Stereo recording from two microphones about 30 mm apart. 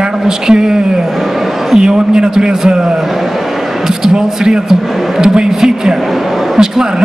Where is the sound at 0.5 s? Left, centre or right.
Right.